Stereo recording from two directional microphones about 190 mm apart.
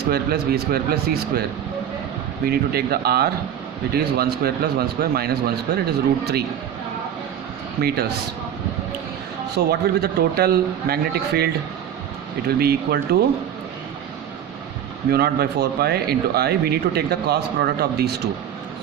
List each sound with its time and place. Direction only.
0.0 s speech: 55° right (ahead or behind)
2.5 s speech: 55° right (ahead or behind)
7.8 s speech: 55° right (ahead or behind)
9.6 s speech: 55° right (ahead or behind)
15.1 s speech: 55° right (ahead or behind)